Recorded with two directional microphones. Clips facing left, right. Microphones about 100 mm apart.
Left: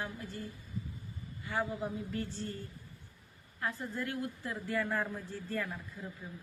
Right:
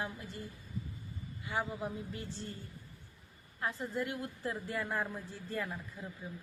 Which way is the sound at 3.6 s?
25° right (ahead or behind).